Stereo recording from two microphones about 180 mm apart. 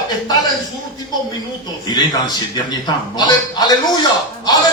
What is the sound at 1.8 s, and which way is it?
A man's voice, 25° left (ahead or behind).